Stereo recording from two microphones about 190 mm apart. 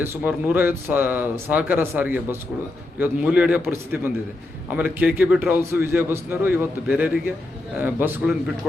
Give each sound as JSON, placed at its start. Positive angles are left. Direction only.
{"t": 0.0, "sound": "a man's voice", "side_deg": -10}